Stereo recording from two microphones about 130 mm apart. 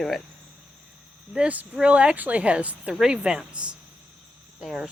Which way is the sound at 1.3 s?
10° right (ahead or behind).